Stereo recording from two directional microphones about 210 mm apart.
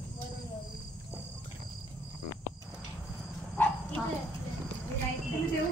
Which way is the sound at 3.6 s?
10° left (ahead or behind).